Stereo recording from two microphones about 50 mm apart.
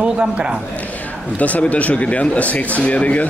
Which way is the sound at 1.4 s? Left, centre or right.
Left.